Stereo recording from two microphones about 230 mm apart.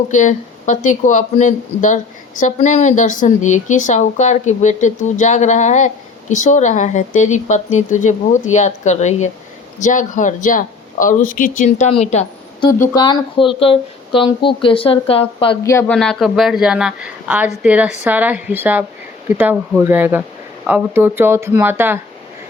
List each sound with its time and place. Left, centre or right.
0.1 s a woman's voice: left; by 21.9 s centre